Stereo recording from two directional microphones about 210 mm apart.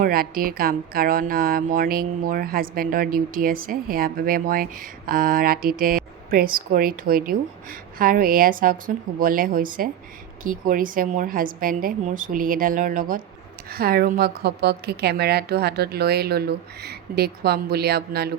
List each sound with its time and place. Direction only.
0.0 s a woman's voice: 45° right (ahead or behind)